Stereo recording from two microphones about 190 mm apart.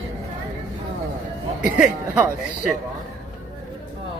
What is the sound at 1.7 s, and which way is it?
Speech, 10° right (ahead or behind).